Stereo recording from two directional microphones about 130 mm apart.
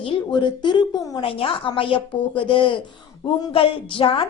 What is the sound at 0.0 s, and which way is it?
A woman's voice, 40° left (ahead or behind).